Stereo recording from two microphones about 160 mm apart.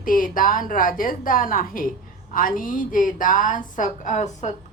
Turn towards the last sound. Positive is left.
turn(degrees=50)  # may be behind; listen again after turning